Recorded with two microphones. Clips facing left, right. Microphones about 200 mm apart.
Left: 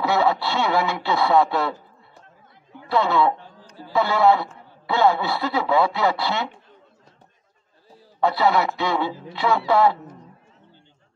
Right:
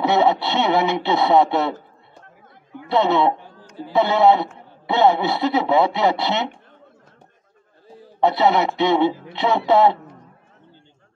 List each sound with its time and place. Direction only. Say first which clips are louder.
0.0 s a man's voice: right 3 dB; 20° right (ahead or behind)
2.9 s a man's voice: right 2 dB; 25° right (ahead or behind)
7.9 s a man's voice: right 3 dB; 20° right (ahead or behind)